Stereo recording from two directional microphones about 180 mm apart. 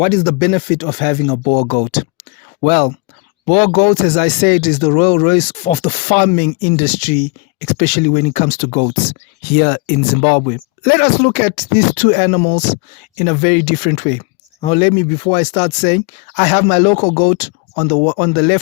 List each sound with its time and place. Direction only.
0.0 s speech: 35° left (ahead or behind)
9.5 s speech: 55° left (ahead or behind); by 18.6 s 35° left (ahead or behind)